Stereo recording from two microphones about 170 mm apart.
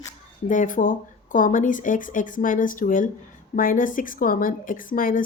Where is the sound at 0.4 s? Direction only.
50° left (ahead or behind).